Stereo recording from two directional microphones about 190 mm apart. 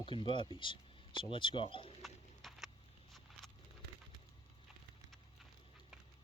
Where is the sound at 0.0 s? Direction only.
30° left (ahead or behind).